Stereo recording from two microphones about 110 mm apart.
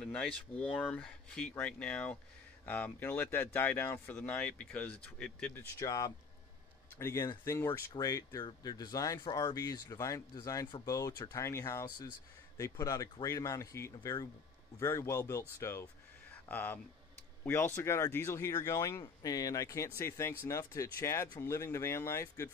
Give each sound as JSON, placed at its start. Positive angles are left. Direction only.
{"t": 0.0, "sound": "speech", "side_deg": 5}
{"t": 5.8, "sound": "speech", "side_deg": 35}